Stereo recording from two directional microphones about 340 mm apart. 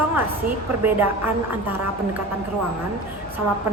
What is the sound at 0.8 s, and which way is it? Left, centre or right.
A woman's voice, centre.